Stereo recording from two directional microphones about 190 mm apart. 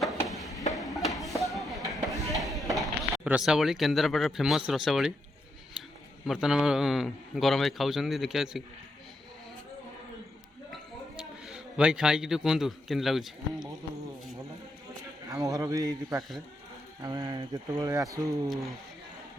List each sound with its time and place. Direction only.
0.0 s a sound: centre (ahead or behind)
0.8 s music: centre (ahead or behind)
1.9 s chop: centre (ahead or behind)
2.3 s a sound: centre (ahead or behind)
3.2 s a man's voice: 5° right (ahead or behind)
5.8 s a sound: 5° right (ahead or behind)
6.2 s a man's voice: 5° right (ahead or behind)
11.4 s a man's voice: 5° right (ahead or behind)
15.3 s speech: 20° right (ahead or behind)
18.4 s a man's voice: centre (ahead or behind)